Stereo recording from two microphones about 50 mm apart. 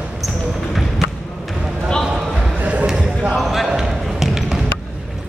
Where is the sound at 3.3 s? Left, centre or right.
Centre.